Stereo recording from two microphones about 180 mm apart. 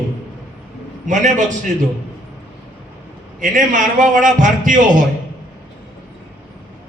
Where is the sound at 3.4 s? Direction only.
45° right (ahead or behind).